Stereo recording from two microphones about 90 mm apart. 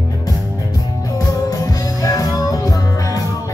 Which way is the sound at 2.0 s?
40° left (ahead or behind).